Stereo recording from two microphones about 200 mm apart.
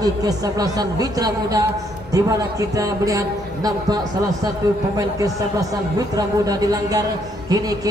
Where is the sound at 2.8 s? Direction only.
15° right (ahead or behind).